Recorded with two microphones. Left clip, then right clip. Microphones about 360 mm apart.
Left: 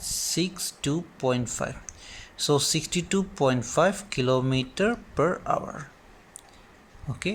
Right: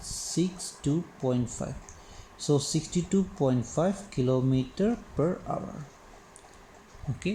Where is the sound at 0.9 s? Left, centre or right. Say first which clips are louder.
Left 3 dB; left.